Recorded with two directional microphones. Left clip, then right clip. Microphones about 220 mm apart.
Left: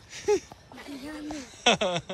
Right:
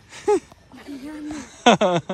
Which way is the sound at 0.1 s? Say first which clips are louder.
Right 6 dB; centre (ahead or behind).